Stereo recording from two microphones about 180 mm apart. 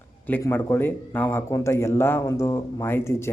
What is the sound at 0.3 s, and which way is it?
Speech, 10° left (ahead or behind).